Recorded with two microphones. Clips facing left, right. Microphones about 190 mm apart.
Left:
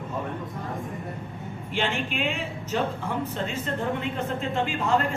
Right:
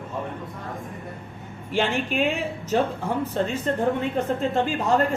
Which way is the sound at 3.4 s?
45° right (ahead or behind).